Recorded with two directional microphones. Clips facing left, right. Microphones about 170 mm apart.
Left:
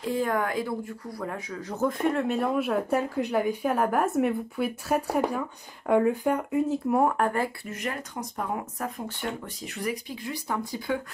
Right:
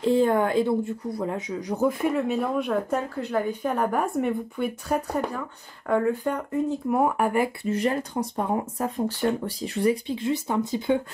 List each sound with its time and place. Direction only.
0.0 s speech: 25° right (ahead or behind); by 7.4 s 10° right (ahead or behind)
7.6 s speech: 30° right (ahead or behind)